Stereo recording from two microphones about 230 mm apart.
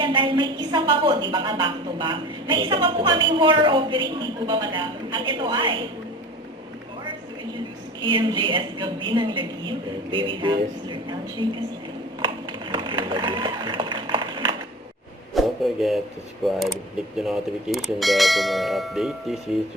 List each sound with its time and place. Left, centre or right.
0.0 s a woman's voice: right
8.0 s a woman's voice: right
12.2 s a sound: right
15.4 s speech: centre
17.2 s bell: centre